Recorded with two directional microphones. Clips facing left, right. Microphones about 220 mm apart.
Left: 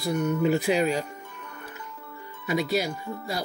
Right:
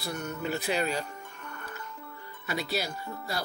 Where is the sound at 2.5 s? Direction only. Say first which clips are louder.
Left 7 dB; 10° left (ahead or behind).